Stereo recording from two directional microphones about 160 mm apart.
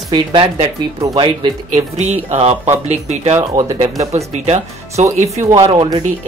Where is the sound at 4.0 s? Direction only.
20° right (ahead or behind).